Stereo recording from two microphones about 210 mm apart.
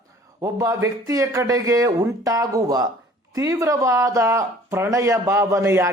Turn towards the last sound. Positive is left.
turn(degrees=-10)  # may be behind; listen again after turning